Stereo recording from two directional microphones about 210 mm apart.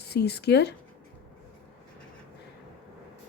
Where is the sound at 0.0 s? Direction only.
50° left (ahead or behind).